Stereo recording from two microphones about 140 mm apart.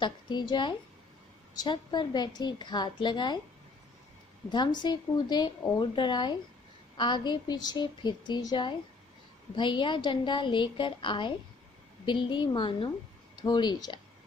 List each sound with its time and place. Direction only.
0.0 s a woman's voice: 30° left (ahead or behind)
4.5 s a woman's voice: 30° left (ahead or behind)